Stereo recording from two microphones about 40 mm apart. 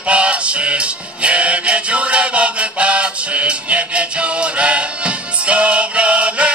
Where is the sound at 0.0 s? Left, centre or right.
Right.